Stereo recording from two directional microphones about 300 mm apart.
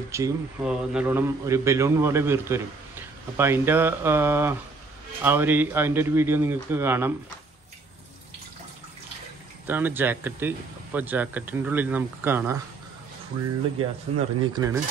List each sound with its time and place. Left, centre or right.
0.1 s a man's voice: centre
9.7 s a man's voice: centre
14.1 s speech: right
14.4 s a man's voice: centre